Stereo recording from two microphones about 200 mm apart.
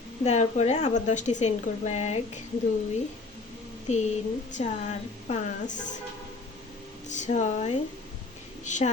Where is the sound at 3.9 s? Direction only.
35° left (ahead or behind).